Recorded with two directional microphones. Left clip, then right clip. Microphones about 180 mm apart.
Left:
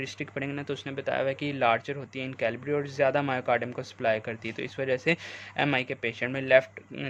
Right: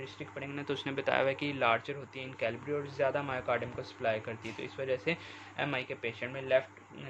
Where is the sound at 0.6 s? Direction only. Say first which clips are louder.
Left 1 dB; 20° left (ahead or behind); by 7.0 s 35° left (ahead or behind).